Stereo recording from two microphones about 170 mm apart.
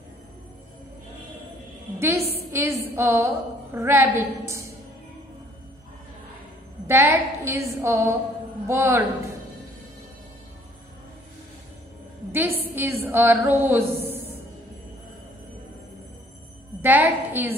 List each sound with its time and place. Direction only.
2.0 s a woman's voice: 15° right (ahead or behind)
6.9 s a woman's voice: 15° right (ahead or behind)
12.3 s a woman's voice: 15° right (ahead or behind)
16.8 s a woman's voice: 10° right (ahead or behind)